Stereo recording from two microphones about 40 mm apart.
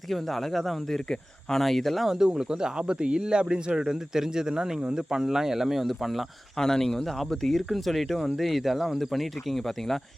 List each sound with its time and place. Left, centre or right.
0.1 s speech: centre
1.1 s speech: centre
1.6 s speech: centre
2.0 s speech: centre
6.6 s speech: centre